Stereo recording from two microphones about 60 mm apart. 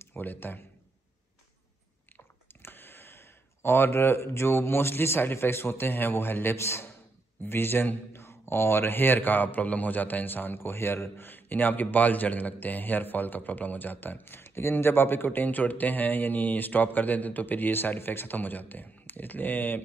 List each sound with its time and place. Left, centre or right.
0.1 s a man's voice: left
2.6 s speech: left
7.4 s a man's voice: left